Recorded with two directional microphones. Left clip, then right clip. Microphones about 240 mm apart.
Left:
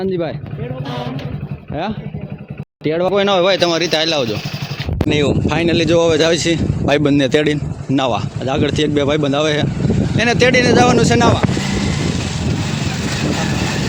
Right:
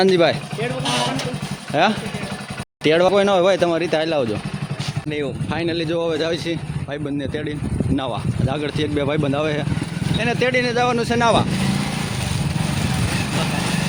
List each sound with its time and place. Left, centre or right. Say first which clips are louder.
0.0 s speech: right 5 dB; centre
1.7 s speech: right 6 dB; centre
5.0 s speech: left 9 dB; left
5.5 s speech: left 6 dB; centre
6.8 s speech: left 14 dB; left; by 11.3 s centre